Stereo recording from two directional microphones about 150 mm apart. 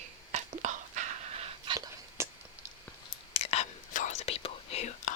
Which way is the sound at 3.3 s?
45° left (ahead or behind).